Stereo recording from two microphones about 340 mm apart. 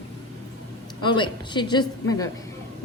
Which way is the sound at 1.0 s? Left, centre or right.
Centre.